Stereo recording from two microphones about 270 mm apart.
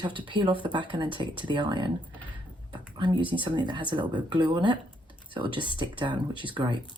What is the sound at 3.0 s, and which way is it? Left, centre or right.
Speech, centre.